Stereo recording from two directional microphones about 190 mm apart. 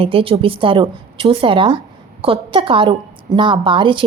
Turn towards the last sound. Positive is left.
turn(degrees=-25)  # may be behind; listen again after turning